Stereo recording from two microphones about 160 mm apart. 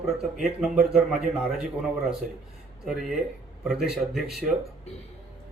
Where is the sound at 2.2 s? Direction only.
55° right (ahead or behind).